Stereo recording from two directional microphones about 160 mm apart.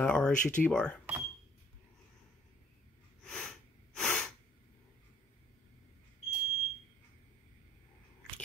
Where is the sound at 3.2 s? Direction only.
5° left (ahead or behind).